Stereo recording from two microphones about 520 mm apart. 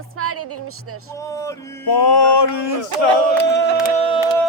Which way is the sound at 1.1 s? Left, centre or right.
Centre.